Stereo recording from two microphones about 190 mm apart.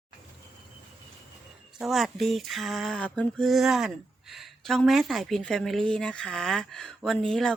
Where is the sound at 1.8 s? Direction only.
Centre (ahead or behind).